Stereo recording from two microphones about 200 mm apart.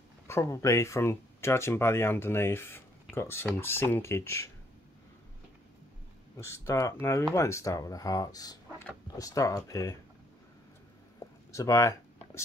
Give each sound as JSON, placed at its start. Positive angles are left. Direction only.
{"t": 0.3, "sound": "speech", "side_deg": 15}
{"t": 6.3, "sound": "speech", "side_deg": 15}
{"t": 11.2, "sound": "a sound", "side_deg": 15}
{"t": 11.5, "sound": "speech", "side_deg": 15}